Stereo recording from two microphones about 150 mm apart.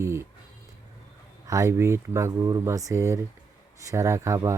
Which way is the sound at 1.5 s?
20° right (ahead or behind).